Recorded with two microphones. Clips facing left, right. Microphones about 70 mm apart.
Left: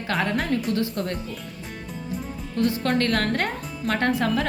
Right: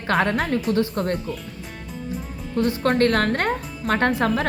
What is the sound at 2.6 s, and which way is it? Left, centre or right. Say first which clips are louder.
A woman's voice: right 3 dB; right.